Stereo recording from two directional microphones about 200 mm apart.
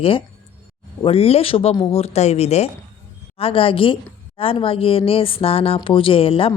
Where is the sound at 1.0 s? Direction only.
30° left (ahead or behind).